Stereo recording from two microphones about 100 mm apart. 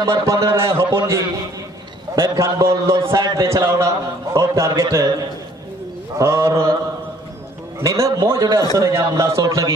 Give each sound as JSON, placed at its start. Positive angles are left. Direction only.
{"t": 0.0, "sound": "a man's voice", "side_deg": -30}
{"t": 2.2, "sound": "a man's voice", "side_deg": -30}
{"t": 7.8, "sound": "a man's voice", "side_deg": -35}